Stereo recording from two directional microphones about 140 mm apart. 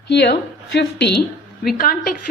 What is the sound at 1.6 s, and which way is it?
Speech, 90° left.